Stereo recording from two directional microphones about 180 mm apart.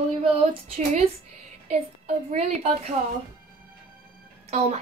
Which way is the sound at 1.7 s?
40° right (ahead or behind).